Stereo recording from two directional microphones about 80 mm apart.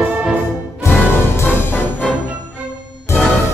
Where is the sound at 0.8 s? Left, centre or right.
Left.